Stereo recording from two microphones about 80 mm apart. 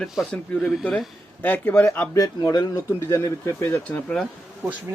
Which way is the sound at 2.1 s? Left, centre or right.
Left.